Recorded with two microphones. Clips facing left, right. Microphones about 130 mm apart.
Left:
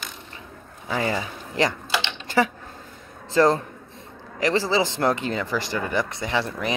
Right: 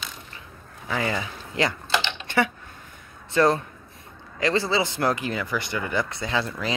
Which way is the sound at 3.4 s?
25° left (ahead or behind).